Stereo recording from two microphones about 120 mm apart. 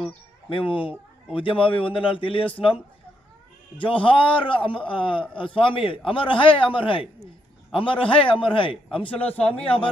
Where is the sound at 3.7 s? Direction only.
45° left (ahead or behind).